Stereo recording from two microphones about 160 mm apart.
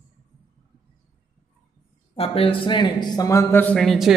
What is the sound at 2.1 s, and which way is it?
Speech, 35° left (ahead or behind).